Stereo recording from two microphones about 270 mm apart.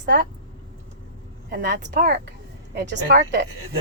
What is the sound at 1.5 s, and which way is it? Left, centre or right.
A woman's voice, right.